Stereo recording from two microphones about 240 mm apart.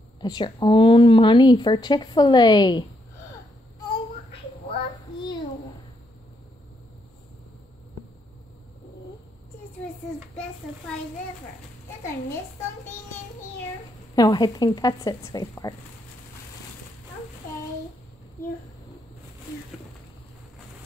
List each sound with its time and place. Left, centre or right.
0.2 s a woman's voice: centre
3.8 s a sound: left
5.1 s babbling: centre
14.1 s speech: centre